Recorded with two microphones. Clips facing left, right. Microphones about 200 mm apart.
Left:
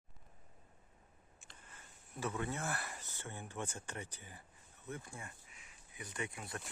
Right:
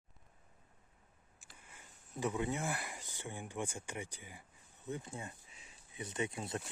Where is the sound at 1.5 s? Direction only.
10° right (ahead or behind).